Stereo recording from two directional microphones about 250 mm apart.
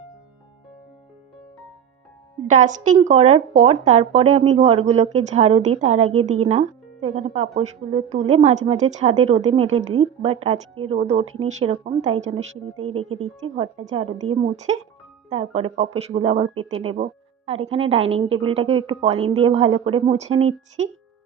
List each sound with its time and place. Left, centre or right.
2.6 s speech: right
12.7 s speech: right
13.8 s speech: right